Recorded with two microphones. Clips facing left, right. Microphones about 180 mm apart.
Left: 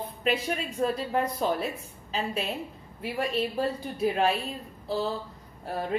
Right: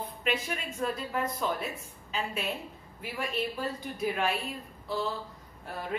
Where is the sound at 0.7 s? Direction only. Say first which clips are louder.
Left 5 dB; 35° left (ahead or behind).